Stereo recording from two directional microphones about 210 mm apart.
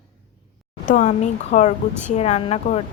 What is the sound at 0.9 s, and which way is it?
Speech, 35° left (ahead or behind).